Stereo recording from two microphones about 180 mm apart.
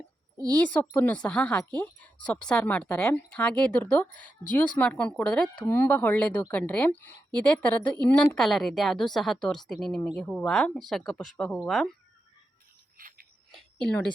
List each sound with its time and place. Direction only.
0.4 s a woman's voice: 5° left (ahead or behind)
13.0 s a sound: 50° right (ahead or behind)
13.8 s a woman's voice: 5° left (ahead or behind)